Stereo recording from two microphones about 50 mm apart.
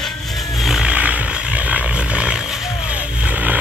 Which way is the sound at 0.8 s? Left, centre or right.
Right.